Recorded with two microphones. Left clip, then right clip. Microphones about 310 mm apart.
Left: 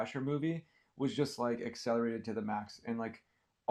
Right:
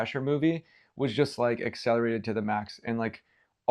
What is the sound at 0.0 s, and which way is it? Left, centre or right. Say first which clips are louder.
Speech: right 9 dB; right.